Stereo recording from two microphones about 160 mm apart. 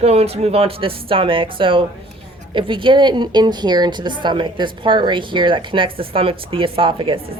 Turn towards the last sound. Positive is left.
turn(degrees=-35)  # may be behind; listen again after turning